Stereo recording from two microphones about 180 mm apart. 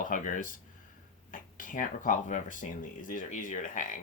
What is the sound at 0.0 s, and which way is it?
Speech, 45° left (ahead or behind).